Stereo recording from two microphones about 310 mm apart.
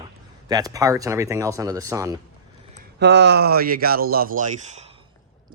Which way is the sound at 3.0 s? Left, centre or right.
Right.